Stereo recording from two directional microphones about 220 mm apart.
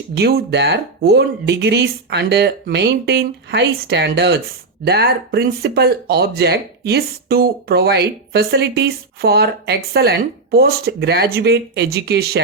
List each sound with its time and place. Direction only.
0.1 s speech: 50° right (ahead or behind)